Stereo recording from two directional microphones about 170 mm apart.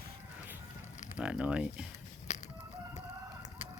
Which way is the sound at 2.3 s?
45° left (ahead or behind).